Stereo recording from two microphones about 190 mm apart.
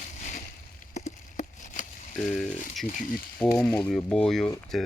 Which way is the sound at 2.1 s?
5° left (ahead or behind).